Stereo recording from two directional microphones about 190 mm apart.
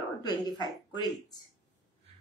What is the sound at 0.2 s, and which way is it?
Speech, 20° left (ahead or behind).